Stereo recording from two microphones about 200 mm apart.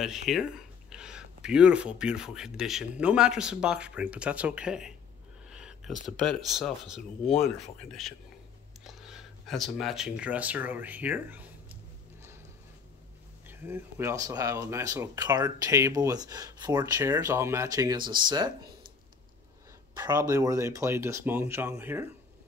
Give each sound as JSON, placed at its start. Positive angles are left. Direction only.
{"t": 0.3, "sound": "speech", "side_deg": -5}
{"t": 8.8, "sound": "a sound", "side_deg": 0}
{"t": 13.5, "sound": "speech", "side_deg": -10}
{"t": 20.0, "sound": "speech", "side_deg": -20}